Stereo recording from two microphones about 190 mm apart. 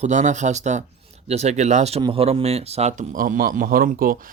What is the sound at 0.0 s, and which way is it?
A man's voice, 40° right (ahead or behind).